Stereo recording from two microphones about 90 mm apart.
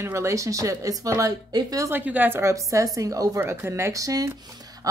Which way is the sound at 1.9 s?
20° right (ahead or behind).